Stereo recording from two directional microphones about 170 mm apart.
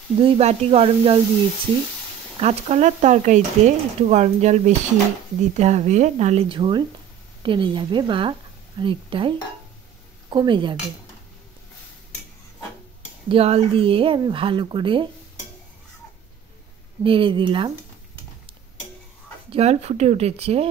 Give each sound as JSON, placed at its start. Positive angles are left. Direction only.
{"t": 0.2, "sound": "speech", "side_deg": -40}
{"t": 2.4, "sound": "a woman's voice", "side_deg": -40}
{"t": 10.3, "sound": "speech", "side_deg": -25}
{"t": 13.3, "sound": "speech", "side_deg": -35}
{"t": 17.0, "sound": "speech", "side_deg": -30}
{"t": 19.5, "sound": "speech", "side_deg": -35}